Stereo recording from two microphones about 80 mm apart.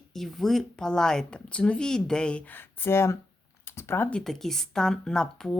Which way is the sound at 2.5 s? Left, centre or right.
Left.